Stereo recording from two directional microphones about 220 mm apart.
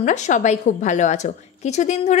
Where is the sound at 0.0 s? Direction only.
35° left (ahead or behind).